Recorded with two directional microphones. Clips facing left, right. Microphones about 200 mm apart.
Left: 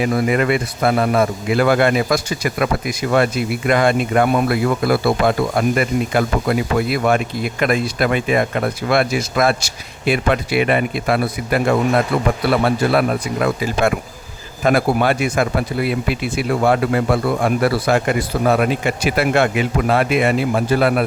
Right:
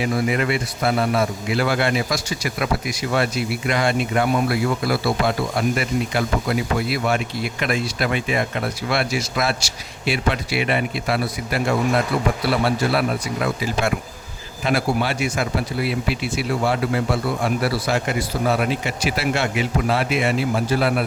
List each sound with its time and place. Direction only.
0.0 s a man's voice: 50° left (ahead or behind)